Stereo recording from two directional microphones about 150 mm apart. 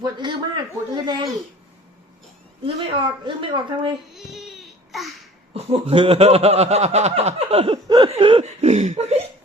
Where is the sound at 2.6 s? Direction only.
35° right (ahead or behind).